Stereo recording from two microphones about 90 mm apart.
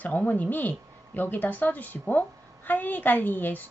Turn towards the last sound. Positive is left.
turn(degrees=20)  # may be behind; listen again after turning